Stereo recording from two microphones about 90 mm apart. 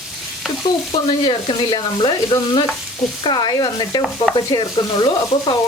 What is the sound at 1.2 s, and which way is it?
Sizzle, 70° left (ahead or behind).